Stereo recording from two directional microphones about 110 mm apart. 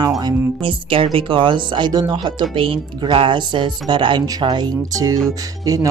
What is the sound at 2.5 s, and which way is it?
Speech, 50° right (ahead or behind).